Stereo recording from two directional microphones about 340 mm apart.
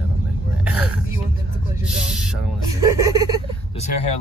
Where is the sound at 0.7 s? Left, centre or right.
Centre.